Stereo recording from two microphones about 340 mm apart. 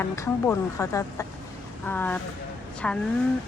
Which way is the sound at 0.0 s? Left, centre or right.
Centre.